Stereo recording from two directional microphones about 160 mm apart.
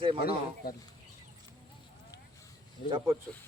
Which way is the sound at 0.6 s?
75° left (ahead or behind).